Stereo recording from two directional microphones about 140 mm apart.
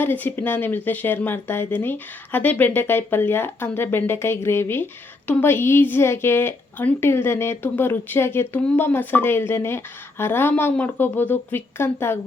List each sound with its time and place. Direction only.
0.0 s a woman's voice: 15° left (ahead or behind)